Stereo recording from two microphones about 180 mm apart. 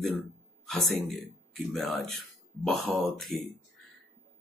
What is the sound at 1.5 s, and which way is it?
Speech, centre (ahead or behind).